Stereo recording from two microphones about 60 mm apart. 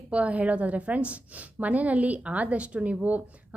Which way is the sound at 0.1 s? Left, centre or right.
Right.